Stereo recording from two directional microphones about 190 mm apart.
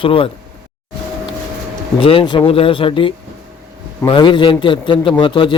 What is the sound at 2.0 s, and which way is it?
A man's voice, 25° left (ahead or behind).